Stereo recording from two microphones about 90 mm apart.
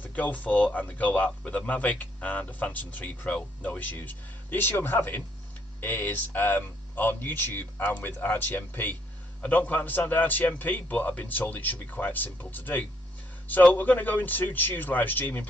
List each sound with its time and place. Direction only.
0.0 s a man's voice: 20° left (ahead or behind)